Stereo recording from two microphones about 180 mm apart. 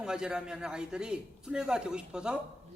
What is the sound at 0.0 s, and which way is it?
A man's voice, 5° right (ahead or behind).